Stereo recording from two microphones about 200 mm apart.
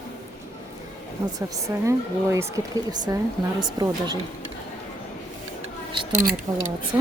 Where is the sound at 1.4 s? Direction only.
15° right (ahead or behind).